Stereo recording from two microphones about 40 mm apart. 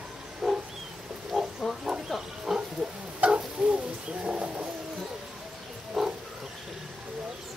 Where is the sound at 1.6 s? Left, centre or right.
Centre.